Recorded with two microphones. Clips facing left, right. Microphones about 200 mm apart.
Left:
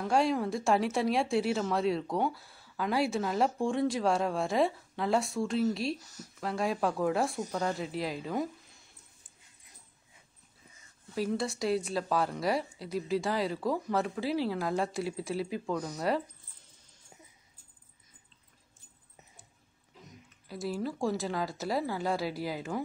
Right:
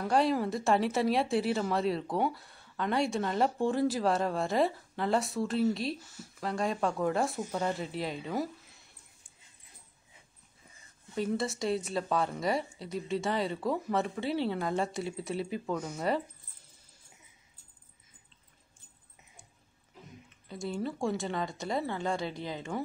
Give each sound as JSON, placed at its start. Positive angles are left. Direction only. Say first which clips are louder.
{"t": 0.0, "sound": "speech", "louder": "even", "side_deg": 0}
{"t": 5.9, "sound": "speech", "louder": "even", "side_deg": 40}
{"t": 6.4, "sound": "speech", "louder": "even", "side_deg": 0}
{"t": 11.1, "sound": "speech", "louder": "even", "side_deg": 0}
{"t": 20.4, "sound": "speech", "louder": "left 1 dB", "side_deg": 5}